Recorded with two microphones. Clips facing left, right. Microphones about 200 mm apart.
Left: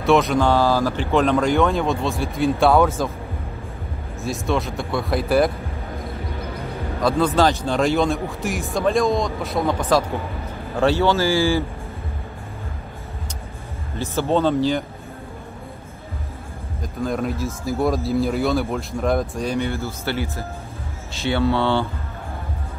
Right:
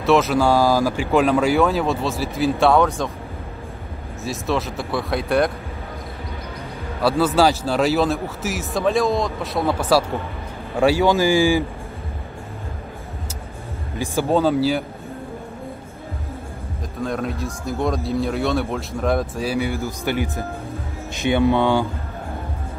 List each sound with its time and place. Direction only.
0.0 s speech: centre (ahead or behind)
4.2 s speech: centre (ahead or behind)
7.0 s speech: 5° right (ahead or behind)
13.9 s speech: 10° right (ahead or behind)
17.0 s speech: centre (ahead or behind); by 21.8 s 15° right (ahead or behind)